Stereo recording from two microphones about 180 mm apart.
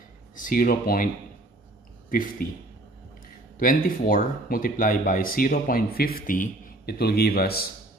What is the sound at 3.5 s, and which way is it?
Speech, 50° left (ahead or behind).